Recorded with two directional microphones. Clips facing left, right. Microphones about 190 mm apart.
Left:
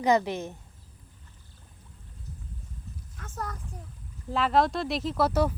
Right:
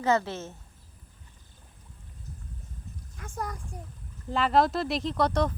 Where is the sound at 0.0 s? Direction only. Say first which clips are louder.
Left 2 dB; 15° left (ahead or behind).